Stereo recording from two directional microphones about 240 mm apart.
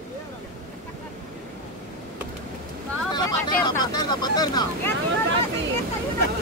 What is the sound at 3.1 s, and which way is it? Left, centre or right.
Vehicle, centre.